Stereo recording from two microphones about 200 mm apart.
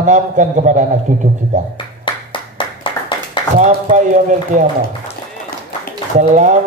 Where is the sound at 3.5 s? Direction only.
40° right (ahead or behind).